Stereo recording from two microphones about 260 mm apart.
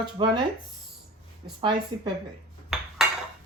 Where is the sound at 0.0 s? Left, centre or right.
Centre.